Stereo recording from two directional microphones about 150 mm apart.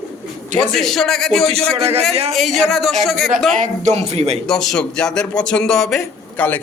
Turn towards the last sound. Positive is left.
turn(degrees=10)  # may be behind; listen again after turning